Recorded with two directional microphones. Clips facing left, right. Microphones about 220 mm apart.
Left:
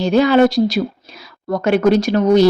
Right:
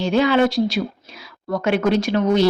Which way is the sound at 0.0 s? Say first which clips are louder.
Left 4 dB; 40° left (ahead or behind).